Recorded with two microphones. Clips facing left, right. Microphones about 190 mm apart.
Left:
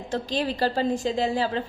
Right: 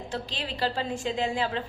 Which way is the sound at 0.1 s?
45° left (ahead or behind).